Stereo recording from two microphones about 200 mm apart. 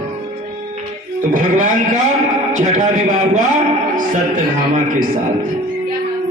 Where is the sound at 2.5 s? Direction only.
40° right (ahead or behind).